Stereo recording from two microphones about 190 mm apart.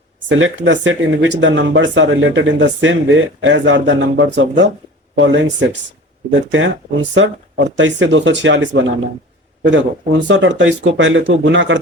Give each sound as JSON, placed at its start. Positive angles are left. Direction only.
{"t": 0.3, "sound": "speech", "side_deg": -80}